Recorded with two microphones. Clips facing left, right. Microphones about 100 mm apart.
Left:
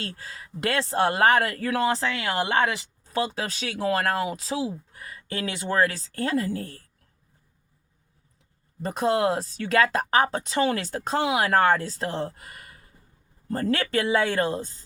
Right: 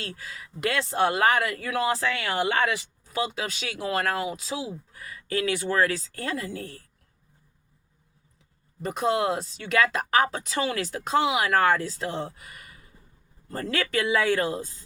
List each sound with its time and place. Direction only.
0.0 s speech: 35° left (ahead or behind)
8.8 s speech: 35° left (ahead or behind)